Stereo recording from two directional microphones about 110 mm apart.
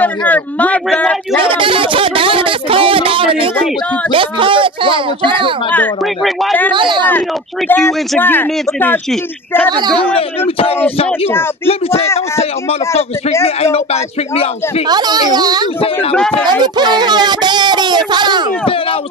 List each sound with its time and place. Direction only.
0.0 s speech: 15° left (ahead or behind)
1.5 s speech: 50° right (ahead or behind)
4.1 s a sound: 50° right (ahead or behind)
6.7 s speech: 45° right (ahead or behind)
7.1 s speech: 15° left (ahead or behind)
9.7 s a child's voice: 40° right (ahead or behind)
11.6 s a man's voice: 65° left (ahead or behind)
14.9 s a child's voice: 40° right (ahead or behind)
15.8 s a man's voice: 60° left (ahead or behind)
16.6 s speech: 40° right (ahead or behind)